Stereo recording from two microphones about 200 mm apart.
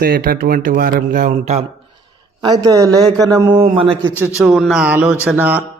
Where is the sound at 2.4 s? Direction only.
20° right (ahead or behind).